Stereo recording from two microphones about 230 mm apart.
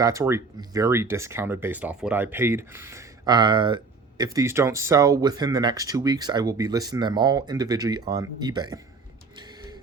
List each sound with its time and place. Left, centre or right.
0.0 s speech: centre